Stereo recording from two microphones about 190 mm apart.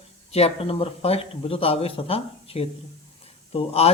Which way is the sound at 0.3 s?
30° left (ahead or behind).